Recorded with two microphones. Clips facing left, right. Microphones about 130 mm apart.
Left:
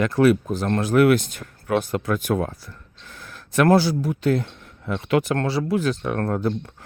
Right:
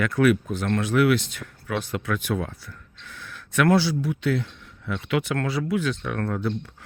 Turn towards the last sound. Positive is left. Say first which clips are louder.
# left 4 dB
turn(degrees=40)  # may be behind; listen again after turning